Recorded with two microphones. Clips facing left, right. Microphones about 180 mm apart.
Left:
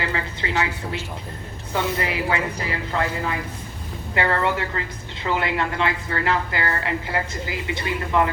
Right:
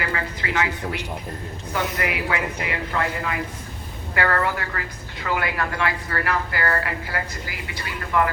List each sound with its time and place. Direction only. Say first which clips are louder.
0.0 s a sound: left 1 dB; 25° left (ahead or behind)
1.7 s a woman's voice: left 2 dB; 30° left (ahead or behind)
4.1 s a woman's voice: left 1 dB; 25° left (ahead or behind)